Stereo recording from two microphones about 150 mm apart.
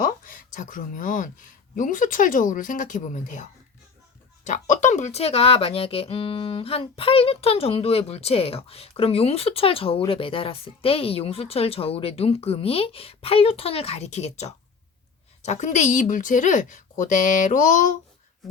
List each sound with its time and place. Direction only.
0.0 s a woman's voice: 65° left (ahead or behind)